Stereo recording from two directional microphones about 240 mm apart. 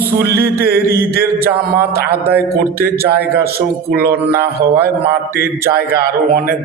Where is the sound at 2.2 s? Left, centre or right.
Centre.